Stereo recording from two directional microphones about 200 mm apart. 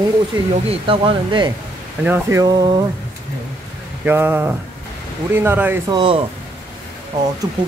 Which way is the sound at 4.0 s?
10° right (ahead or behind).